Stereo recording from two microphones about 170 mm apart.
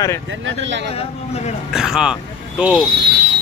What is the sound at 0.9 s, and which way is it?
Speech, 35° left (ahead or behind).